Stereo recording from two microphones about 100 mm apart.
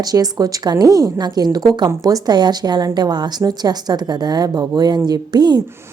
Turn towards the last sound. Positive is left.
turn(degrees=-45)  # may be behind; listen again after turning